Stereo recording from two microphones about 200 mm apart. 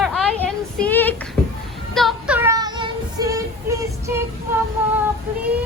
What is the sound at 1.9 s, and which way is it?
Child singing, centre (ahead or behind).